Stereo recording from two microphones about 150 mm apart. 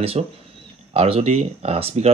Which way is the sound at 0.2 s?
45° right (ahead or behind).